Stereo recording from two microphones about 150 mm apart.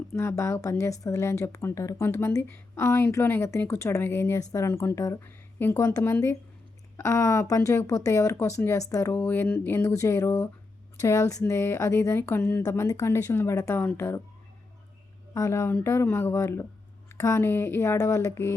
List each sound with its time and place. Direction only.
0.2 s speech: 15° left (ahead or behind)
15.3 s speech: 20° left (ahead or behind)